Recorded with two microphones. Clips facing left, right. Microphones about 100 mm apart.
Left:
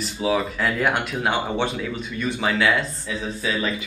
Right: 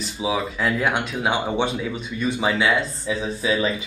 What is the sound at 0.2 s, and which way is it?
Speech, 5° right (ahead or behind).